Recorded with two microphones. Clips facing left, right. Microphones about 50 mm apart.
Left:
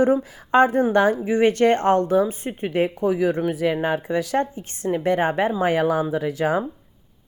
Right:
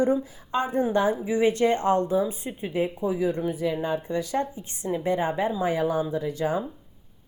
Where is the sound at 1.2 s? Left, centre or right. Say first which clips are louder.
Left 4 dB; left.